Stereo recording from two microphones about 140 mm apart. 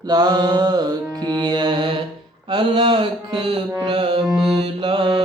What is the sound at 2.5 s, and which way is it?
Mantra, 35° right (ahead or behind).